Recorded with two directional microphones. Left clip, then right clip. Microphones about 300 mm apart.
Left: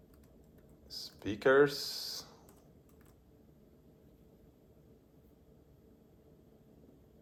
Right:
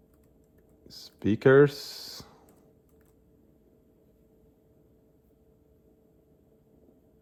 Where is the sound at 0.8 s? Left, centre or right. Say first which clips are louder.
Right 9 dB; right.